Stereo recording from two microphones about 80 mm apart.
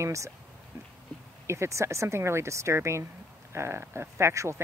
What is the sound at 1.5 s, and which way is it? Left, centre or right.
Speech, right.